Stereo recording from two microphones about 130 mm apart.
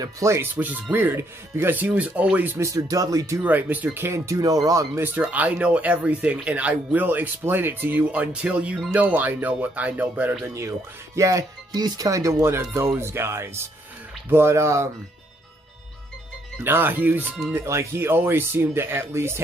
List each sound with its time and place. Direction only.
0.0 s speech: 20° right (ahead or behind)
2.7 s speech: 25° right (ahead or behind)
3.4 s speech: 10° right (ahead or behind)
10.4 s speech: 20° right (ahead or behind)
16.6 s speech: 15° right (ahead or behind)